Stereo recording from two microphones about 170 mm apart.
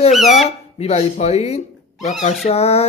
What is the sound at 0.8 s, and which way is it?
Speech, 40° left (ahead or behind).